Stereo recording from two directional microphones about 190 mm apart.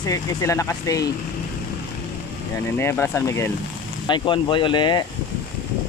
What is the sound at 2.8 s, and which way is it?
Speech, 15° left (ahead or behind).